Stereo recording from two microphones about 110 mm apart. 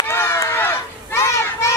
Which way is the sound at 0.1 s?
25° left (ahead or behind).